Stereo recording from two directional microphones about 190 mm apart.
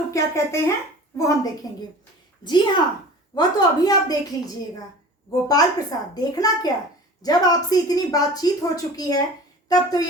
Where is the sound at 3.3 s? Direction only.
20° left (ahead or behind).